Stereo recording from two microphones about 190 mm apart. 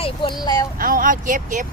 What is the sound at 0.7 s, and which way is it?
Speech, 50° right (ahead or behind).